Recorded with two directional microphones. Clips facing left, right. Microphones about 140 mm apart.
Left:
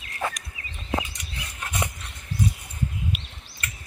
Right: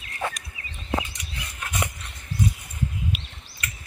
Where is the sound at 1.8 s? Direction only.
20° left (ahead or behind).